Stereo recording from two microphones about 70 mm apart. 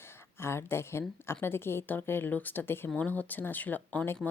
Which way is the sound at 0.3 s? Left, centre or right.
Left.